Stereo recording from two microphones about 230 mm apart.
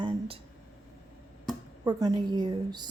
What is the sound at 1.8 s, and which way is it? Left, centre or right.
A woman's voice, centre.